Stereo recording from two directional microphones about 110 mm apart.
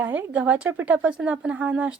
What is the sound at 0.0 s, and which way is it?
A woman's voice, 15° right (ahead or behind).